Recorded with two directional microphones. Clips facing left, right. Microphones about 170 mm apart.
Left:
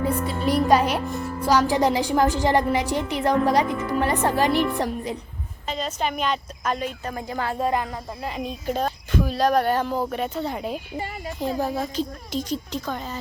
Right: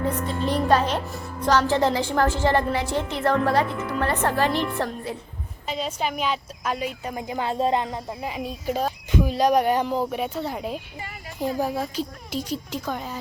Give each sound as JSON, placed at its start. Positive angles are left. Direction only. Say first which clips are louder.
{"t": 0.1, "sound": "a woman's voice", "louder": "left 2 dB", "side_deg": 10}
{"t": 5.6, "sound": "a woman's voice", "louder": "even", "side_deg": -5}
{"t": 8.2, "sound": "speech", "louder": "even", "side_deg": -10}
{"t": 9.1, "sound": "a woman's voice", "louder": "right 1 dB", "side_deg": -15}
{"t": 10.1, "sound": "a woman's voice", "louder": "left 1 dB", "side_deg": -5}